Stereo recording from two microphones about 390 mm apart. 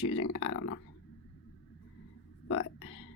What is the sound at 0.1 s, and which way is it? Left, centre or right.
Speech, left.